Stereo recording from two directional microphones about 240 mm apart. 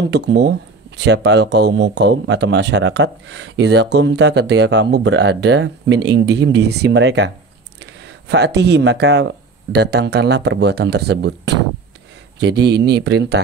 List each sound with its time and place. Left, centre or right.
0.1 s speech: right